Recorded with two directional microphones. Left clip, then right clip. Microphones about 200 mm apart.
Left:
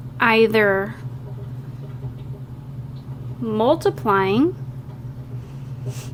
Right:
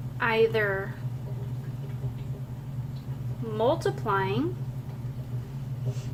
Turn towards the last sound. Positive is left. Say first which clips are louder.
# left 9 dB
turn(degrees=50)  # may be behind; listen again after turning